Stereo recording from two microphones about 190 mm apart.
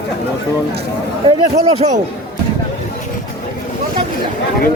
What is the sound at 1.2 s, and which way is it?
Speech, 30° right (ahead or behind).